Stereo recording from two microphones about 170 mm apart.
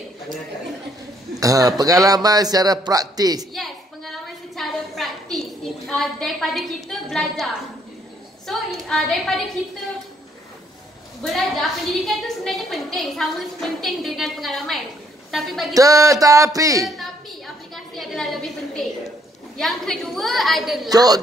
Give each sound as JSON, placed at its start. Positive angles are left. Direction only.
{"t": 1.4, "sound": "a man's voice", "side_deg": -20}
{"t": 3.5, "sound": "a sound", "side_deg": 0}
{"t": 4.6, "sound": "a woman's voice", "side_deg": 0}
{"t": 11.2, "sound": "a woman's voice", "side_deg": 0}
{"t": 15.7, "sound": "a man's voice", "side_deg": -20}
{"t": 16.8, "sound": "a woman's voice", "side_deg": 0}
{"t": 20.9, "sound": "a man's voice", "side_deg": -20}